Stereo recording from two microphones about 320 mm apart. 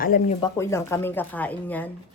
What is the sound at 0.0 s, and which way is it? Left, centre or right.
Speech, left.